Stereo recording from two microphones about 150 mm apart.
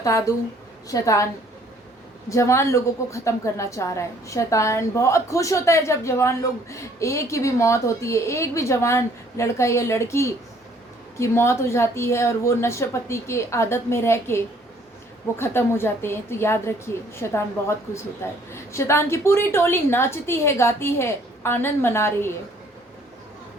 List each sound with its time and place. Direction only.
0.0 s a woman's voice: 20° left (ahead or behind)
2.3 s a woman's voice: 20° left (ahead or behind)